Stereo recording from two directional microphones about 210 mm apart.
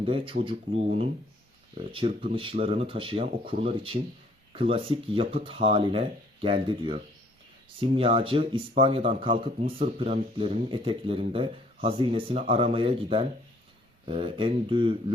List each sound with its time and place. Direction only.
0.0 s speech: 25° right (ahead or behind)
1.9 s speech: 25° right (ahead or behind)